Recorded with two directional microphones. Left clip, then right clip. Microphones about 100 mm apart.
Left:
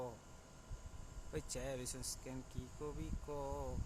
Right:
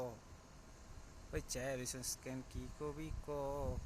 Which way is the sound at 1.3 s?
25° right (ahead or behind).